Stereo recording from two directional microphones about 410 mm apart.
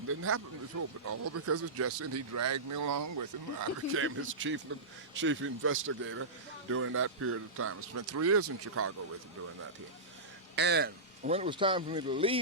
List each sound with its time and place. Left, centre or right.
0.1 s speech: right
3.9 s a man's voice: right
10.5 s a man's voice: right